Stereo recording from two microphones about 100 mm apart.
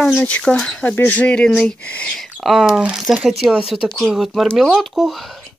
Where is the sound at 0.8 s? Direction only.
20° left (ahead or behind); by 5.3 s centre (ahead or behind).